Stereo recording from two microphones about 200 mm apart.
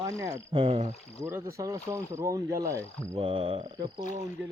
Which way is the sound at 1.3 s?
15° right (ahead or behind).